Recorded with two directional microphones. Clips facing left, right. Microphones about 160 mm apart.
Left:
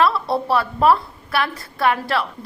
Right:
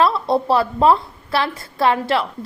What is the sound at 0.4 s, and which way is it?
A woman's voice, 25° right (ahead or behind).